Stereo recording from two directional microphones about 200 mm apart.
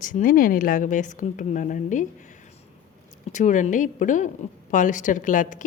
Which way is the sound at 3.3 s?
40° left (ahead or behind).